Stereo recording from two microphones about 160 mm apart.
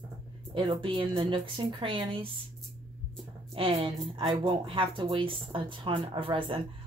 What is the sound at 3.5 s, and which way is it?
A woman's voice, 35° right (ahead or behind).